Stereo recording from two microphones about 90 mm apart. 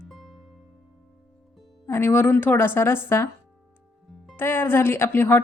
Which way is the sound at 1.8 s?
30° left (ahead or behind).